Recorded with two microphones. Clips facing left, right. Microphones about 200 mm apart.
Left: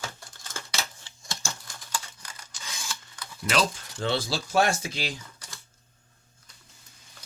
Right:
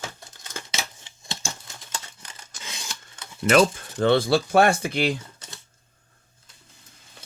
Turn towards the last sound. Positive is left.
turn(degrees=-25)  # may be behind; listen again after turning